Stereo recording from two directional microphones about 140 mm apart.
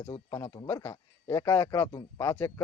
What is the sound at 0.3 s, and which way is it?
Speech, 25° left (ahead or behind).